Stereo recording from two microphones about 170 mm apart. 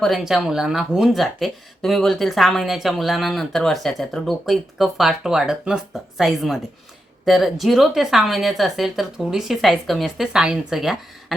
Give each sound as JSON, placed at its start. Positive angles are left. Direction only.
{"t": 0.0, "sound": "speech", "side_deg": 0}